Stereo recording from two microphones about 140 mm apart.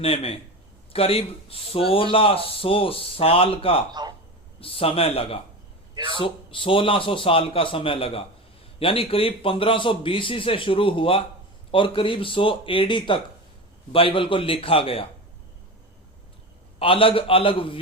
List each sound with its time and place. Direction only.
0.0 s a man's voice: 45° left (ahead or behind)
5.9 s a man's voice: 35° right (ahead or behind)
6.1 s a man's voice: 40° left (ahead or behind)
16.8 s a man's voice: 40° left (ahead or behind)